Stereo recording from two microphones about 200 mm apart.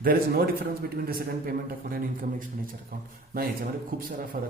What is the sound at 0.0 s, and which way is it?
Speech, 45° right (ahead or behind).